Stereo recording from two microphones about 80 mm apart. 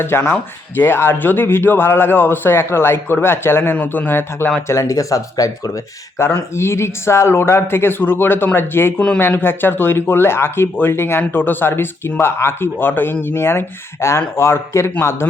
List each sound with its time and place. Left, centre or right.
0.0 s speech: left
4.7 s speech: left
6.1 s speech: left